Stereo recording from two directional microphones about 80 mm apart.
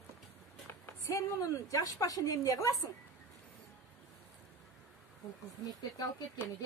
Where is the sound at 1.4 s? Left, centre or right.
Left.